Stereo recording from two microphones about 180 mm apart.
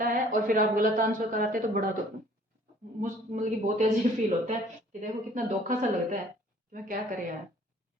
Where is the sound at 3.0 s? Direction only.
45° right (ahead or behind).